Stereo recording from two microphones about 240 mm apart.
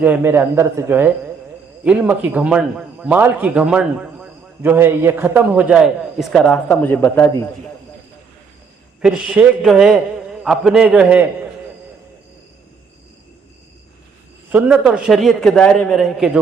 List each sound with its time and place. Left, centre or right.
0.0 s a man's voice: centre
9.0 s speech: centre
14.5 s speech: centre